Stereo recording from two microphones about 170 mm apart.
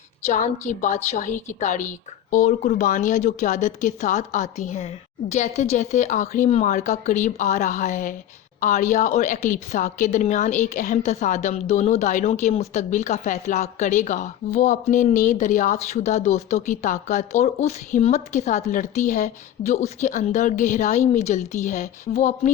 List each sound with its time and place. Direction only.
0.3 s a woman's voice: 45° left (ahead or behind)